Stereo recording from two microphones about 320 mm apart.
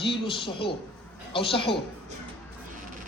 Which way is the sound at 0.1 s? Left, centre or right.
Centre.